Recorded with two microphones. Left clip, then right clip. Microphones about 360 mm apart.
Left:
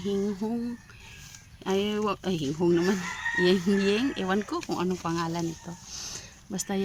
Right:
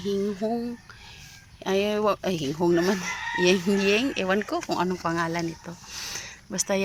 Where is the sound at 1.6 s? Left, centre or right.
Centre.